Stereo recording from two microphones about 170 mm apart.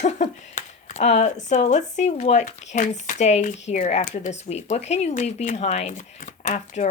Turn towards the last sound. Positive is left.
turn(degrees=45)  # may be behind; listen again after turning